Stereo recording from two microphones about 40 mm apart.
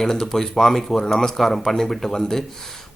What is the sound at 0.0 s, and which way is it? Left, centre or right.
Speech, centre.